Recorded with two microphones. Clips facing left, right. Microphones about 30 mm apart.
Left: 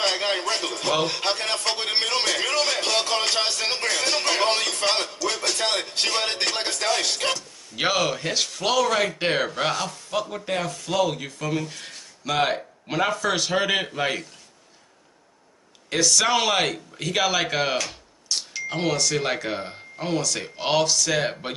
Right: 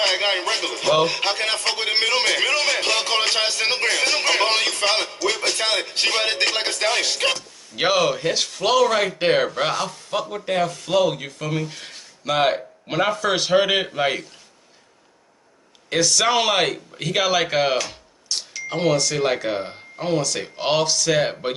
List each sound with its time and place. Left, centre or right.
0.0 s speech: right
1.9 s music: right
7.7 s speech: centre
15.9 s speech: centre
18.3 s a sound: centre
18.7 s speech: centre